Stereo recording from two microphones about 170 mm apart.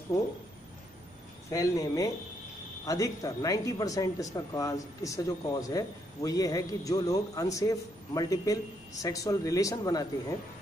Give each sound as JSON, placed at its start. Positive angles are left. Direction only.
{"t": 1.5, "sound": "speech", "side_deg": 20}